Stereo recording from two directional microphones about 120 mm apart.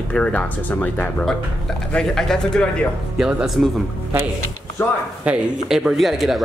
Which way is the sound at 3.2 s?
5° right (ahead or behind).